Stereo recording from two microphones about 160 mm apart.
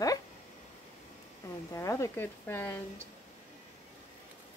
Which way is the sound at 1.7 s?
20° left (ahead or behind).